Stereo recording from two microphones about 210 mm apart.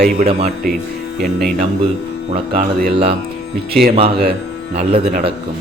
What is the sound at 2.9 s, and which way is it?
Mantra, 30° right (ahead or behind).